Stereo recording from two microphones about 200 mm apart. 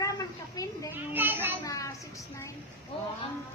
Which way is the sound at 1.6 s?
15° left (ahead or behind).